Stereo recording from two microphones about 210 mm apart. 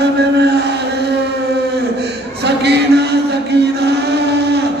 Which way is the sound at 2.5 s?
55° right (ahead or behind).